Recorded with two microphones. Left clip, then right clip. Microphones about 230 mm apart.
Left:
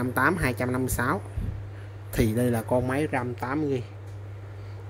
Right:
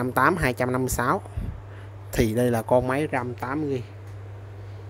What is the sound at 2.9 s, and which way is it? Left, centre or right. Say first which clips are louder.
Speech: right 2 dB; centre.